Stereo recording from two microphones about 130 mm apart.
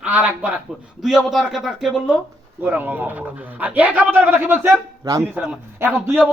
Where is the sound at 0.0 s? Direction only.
10° right (ahead or behind).